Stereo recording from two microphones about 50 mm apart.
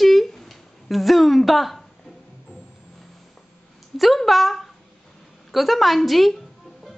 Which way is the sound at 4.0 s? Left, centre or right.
Centre.